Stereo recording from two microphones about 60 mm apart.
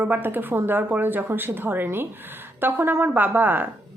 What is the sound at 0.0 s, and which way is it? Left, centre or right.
Speech, right.